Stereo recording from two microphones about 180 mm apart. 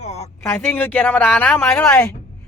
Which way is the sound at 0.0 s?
40° left (ahead or behind).